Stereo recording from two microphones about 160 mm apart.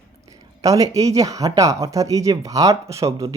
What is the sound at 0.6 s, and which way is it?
Speech, 20° right (ahead or behind).